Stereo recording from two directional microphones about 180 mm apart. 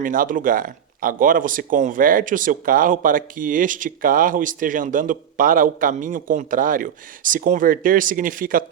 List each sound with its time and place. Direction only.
0.0 s speech: 50° right (ahead or behind)